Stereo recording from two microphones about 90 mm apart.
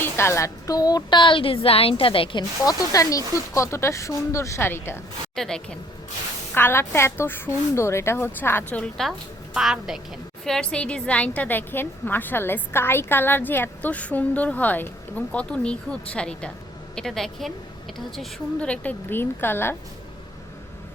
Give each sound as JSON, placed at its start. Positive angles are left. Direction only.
{"t": 0.0, "sound": "speech", "side_deg": 30}
{"t": 2.6, "sound": "speech", "side_deg": 40}
{"t": 5.3, "sound": "a woman's voice", "side_deg": 5}
{"t": 6.5, "sound": "a woman's voice", "side_deg": 25}
{"t": 8.8, "sound": "a woman's voice", "side_deg": 5}
{"t": 10.4, "sound": "a woman's voice", "side_deg": 5}
{"t": 18.7, "sound": "a woman's voice", "side_deg": 15}